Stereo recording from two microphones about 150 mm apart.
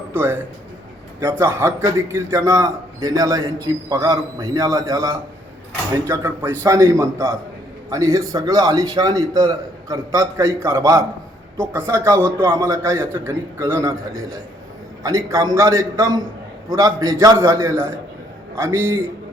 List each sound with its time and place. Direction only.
0.1 s a man's voice: 15° right (ahead or behind)
15.0 s a man's voice: 20° right (ahead or behind)